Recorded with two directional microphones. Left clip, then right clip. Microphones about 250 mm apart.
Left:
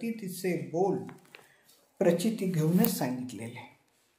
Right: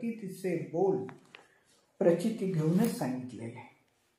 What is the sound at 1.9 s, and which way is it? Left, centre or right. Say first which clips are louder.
Speech: even; left.